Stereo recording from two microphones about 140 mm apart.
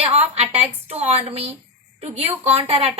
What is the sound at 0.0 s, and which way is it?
A woman's voice, 45° right (ahead or behind).